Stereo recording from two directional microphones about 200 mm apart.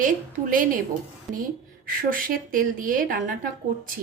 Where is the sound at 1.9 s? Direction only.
45° right (ahead or behind).